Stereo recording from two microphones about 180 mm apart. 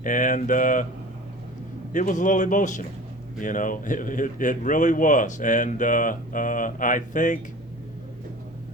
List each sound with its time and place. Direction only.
0.0 s speech: 45° left (ahead or behind)
1.9 s speech: 45° left (ahead or behind)